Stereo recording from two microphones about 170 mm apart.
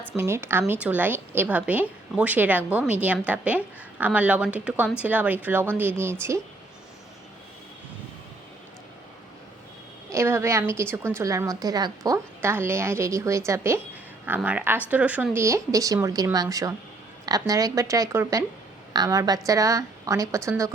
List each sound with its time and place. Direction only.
0.2 s a woman's voice: 15° right (ahead or behind)
10.1 s a woman's voice: 15° right (ahead or behind)